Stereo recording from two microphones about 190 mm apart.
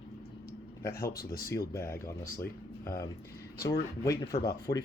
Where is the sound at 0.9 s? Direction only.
50° left (ahead or behind).